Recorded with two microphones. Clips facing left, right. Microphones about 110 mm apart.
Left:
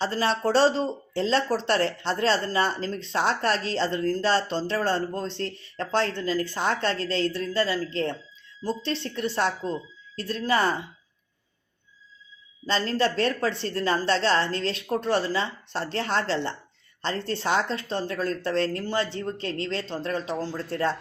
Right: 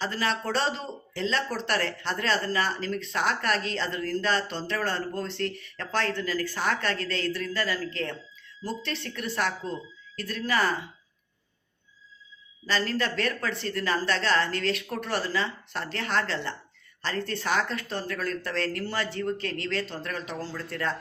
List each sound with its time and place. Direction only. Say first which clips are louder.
0.0 s speech: left 4 dB; 30° left (ahead or behind)
12.6 s speech: left 3 dB; 30° left (ahead or behind)